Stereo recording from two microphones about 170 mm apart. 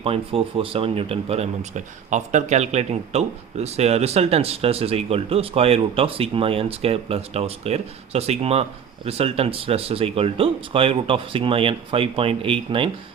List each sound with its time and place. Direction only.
0.0 s speech: 35° right (ahead or behind)